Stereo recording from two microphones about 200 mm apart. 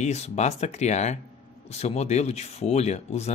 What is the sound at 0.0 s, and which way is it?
Speech, 35° left (ahead or behind).